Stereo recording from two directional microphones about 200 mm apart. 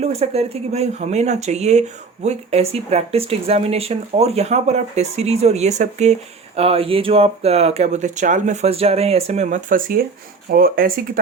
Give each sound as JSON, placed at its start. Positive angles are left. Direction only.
{"t": 0.0, "sound": "speech", "side_deg": -30}